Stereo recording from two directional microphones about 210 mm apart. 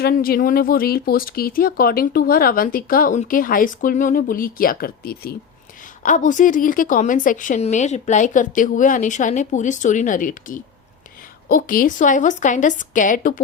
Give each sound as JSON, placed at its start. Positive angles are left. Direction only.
{"t": 0.0, "sound": "speech", "side_deg": 45}